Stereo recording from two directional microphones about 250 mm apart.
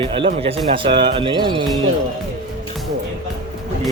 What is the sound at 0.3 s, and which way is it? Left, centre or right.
Speech, right.